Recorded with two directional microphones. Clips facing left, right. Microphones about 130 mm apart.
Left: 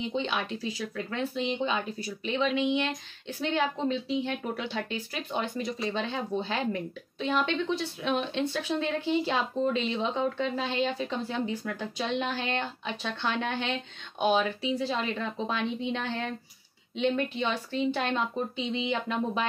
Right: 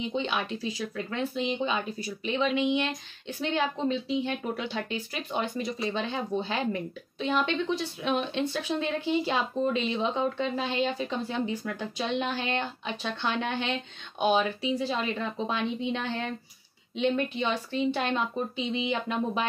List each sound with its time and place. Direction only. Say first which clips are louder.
0.0 s speech: right 1 dB; 15° right (ahead or behind)